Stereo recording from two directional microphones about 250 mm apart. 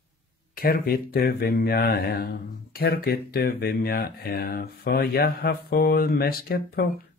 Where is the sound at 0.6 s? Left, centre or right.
Left.